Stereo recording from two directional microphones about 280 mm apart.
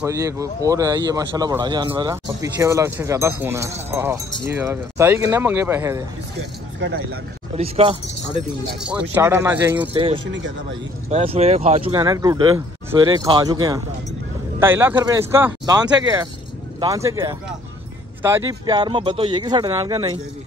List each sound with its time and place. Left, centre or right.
0.0 s speech: centre
6.8 s speech: right
7.5 s speech: right
8.7 s speech: centre
9.9 s speech: centre
10.2 s speech: right
11.1 s speech: right
11.9 s speech: centre